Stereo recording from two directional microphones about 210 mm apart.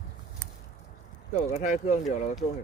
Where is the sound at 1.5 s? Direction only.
35° left (ahead or behind).